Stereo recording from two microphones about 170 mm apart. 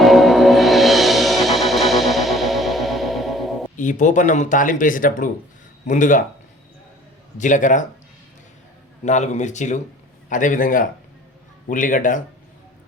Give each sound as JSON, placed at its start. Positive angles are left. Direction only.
{"t": 0.0, "sound": "music", "side_deg": 0}
{"t": 3.8, "sound": "speech", "side_deg": 50}
{"t": 7.3, "sound": "speech", "side_deg": 45}
{"t": 9.0, "sound": "speech", "side_deg": 45}